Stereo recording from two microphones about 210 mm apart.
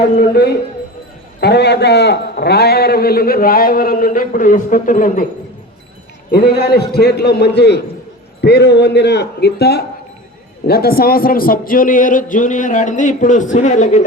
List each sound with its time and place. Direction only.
1.4 s a man's voice: 55° left (ahead or behind)
6.3 s a man's voice: 50° left (ahead or behind)